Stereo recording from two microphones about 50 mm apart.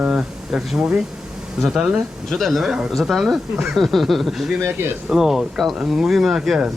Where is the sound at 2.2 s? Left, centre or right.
Centre.